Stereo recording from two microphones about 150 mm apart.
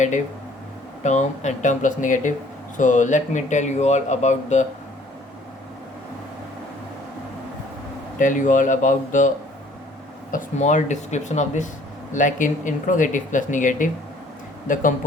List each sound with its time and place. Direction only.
1.0 s speech: 50° left (ahead or behind)
8.2 s speech: 60° left (ahead or behind)
10.3 s speech: 55° left (ahead or behind)